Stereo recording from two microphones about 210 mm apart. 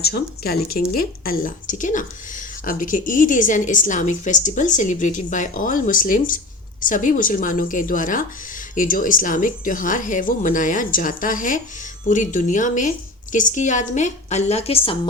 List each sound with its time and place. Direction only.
0.0 s a woman's voice: 50° left (ahead or behind); by 14.9 s 30° left (ahead or behind)